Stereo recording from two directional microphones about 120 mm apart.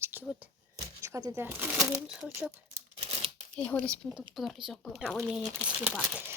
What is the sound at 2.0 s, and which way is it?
Speech, 5° right (ahead or behind).